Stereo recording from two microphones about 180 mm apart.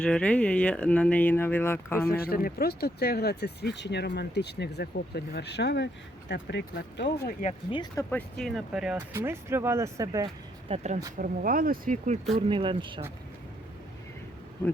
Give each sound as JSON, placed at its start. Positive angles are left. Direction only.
{"t": 0.0, "sound": "speech", "side_deg": 5}
{"t": 2.0, "sound": "speech", "side_deg": 60}
{"t": 7.7, "sound": "speech", "side_deg": 25}
{"t": 8.1, "sound": "speech", "side_deg": 0}
{"t": 9.1, "sound": "speech", "side_deg": -15}
{"t": 10.7, "sound": "speech", "side_deg": -40}
{"t": 11.2, "sound": "speech", "side_deg": -50}
{"t": 12.5, "sound": "speech", "side_deg": -30}